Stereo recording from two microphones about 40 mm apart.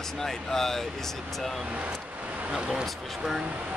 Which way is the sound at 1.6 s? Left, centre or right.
Right.